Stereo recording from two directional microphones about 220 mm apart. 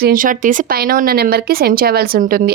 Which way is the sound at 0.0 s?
40° right (ahead or behind).